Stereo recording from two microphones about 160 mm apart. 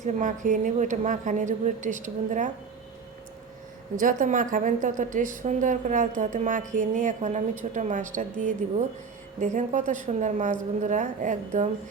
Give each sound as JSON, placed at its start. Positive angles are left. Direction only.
{"t": 0.0, "sound": "a woman's voice", "side_deg": -50}
{"t": 4.0, "sound": "a woman's voice", "side_deg": -55}